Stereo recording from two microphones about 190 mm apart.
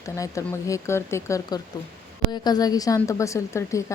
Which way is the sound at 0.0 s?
15° left (ahead or behind).